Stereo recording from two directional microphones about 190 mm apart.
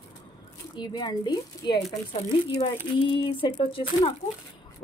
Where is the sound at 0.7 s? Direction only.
25° left (ahead or behind).